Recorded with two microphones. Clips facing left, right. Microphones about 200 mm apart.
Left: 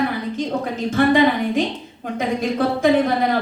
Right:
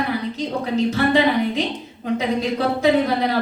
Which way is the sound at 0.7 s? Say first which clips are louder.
Left 1 dB; 50° left (ahead or behind).